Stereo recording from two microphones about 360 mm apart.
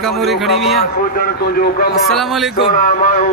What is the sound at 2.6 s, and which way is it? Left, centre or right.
Speech, left.